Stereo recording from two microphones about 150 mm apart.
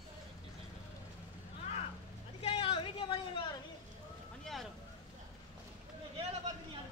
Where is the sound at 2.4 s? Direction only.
40° left (ahead or behind).